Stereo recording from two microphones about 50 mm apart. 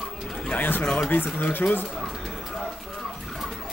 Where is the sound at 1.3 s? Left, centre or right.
Left.